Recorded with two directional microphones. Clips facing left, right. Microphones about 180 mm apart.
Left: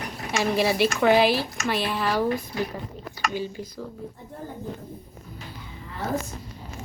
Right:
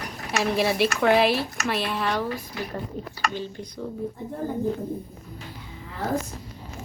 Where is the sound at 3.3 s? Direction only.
10° left (ahead or behind).